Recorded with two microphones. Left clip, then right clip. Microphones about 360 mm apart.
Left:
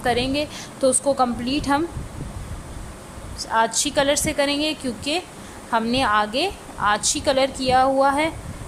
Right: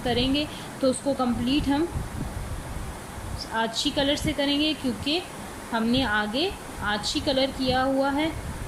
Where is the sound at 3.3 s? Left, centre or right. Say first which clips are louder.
Left 7 dB; centre.